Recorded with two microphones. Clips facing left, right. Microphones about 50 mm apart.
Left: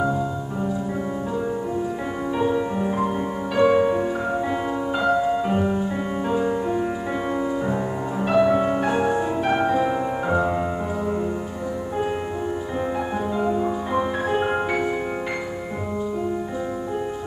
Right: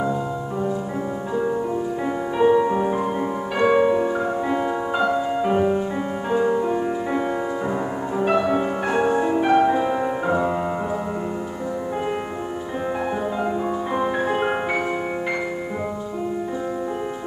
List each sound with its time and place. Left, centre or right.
2.5 s music: centre
5.3 s music: centre
13.4 s music: centre